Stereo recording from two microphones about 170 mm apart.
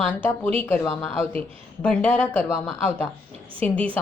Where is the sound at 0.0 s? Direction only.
10° left (ahead or behind).